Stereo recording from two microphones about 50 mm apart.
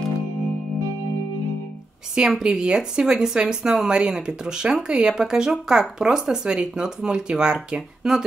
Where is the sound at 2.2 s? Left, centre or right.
Centre.